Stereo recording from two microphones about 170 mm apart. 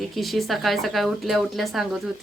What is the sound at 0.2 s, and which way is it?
Speech, centre (ahead or behind).